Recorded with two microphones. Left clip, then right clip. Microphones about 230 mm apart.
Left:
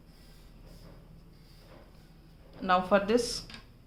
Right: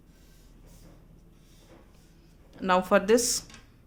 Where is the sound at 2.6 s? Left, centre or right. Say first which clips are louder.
Right 3 dB; right.